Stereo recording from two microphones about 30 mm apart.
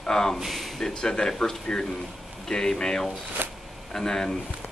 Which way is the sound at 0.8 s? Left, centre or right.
Left.